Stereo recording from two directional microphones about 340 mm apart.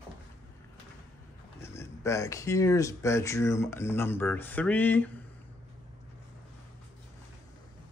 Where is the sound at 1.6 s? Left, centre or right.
Centre.